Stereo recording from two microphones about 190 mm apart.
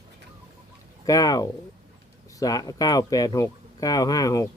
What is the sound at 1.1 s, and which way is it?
Speech, 20° left (ahead or behind).